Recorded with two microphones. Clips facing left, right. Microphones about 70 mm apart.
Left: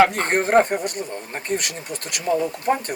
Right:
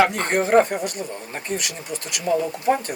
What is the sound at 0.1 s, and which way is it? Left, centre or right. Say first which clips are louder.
Speech: even; left.